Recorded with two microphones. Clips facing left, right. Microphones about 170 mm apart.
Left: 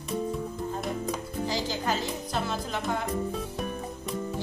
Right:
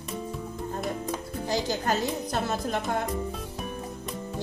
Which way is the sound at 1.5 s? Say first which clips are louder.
Right 4 dB; 45° right (ahead or behind).